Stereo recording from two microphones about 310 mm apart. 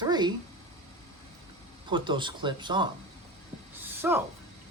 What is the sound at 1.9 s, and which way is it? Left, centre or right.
Speech, centre.